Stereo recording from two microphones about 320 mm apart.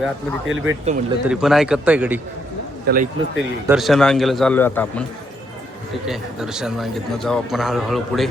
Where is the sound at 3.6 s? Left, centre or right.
Centre.